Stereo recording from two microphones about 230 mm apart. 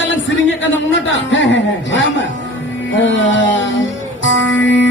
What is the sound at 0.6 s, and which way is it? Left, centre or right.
A man's voice, left.